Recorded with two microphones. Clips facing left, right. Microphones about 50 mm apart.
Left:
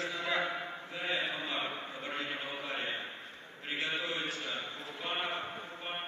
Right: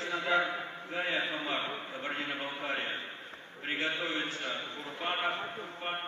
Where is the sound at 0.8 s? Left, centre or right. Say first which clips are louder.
Right 3 dB; right.